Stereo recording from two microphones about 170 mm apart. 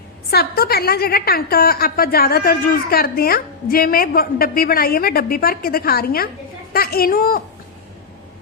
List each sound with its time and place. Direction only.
0.3 s a woman's voice: 65° left (ahead or behind)